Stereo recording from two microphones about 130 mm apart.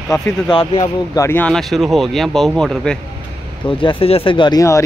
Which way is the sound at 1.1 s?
20° left (ahead or behind).